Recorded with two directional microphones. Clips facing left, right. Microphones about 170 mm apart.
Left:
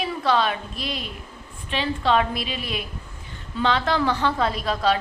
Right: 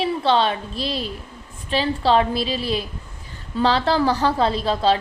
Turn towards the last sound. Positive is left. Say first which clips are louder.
# right 3 dB
turn(degrees=-30)  # may be behind; listen again after turning